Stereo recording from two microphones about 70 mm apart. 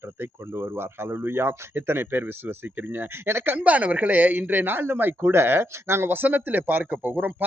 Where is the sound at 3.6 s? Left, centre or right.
Right.